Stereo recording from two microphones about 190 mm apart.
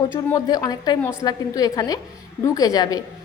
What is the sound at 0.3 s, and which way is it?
A woman's voice, 20° left (ahead or behind).